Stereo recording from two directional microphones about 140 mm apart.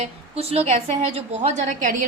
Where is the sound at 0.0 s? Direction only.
45° right (ahead or behind).